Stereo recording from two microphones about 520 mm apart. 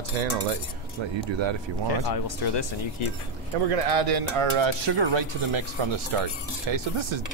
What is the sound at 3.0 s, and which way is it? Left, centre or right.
Speech, left.